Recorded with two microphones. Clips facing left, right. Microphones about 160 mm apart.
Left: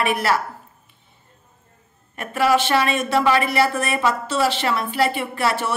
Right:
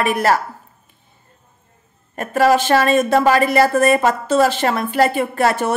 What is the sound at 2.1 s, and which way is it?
A woman's voice, 40° right (ahead or behind).